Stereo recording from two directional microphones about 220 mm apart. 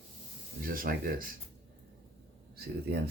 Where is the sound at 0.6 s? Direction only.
40° right (ahead or behind).